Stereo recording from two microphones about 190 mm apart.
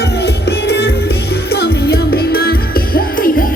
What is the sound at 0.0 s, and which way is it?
Music, 60° left (ahead or behind).